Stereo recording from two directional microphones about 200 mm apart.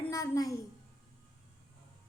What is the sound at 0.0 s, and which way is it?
Speech, 15° left (ahead or behind).